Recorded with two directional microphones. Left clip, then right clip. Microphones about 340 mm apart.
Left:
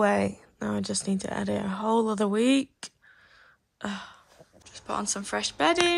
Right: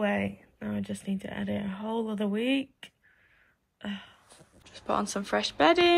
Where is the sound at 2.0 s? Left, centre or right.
Centre.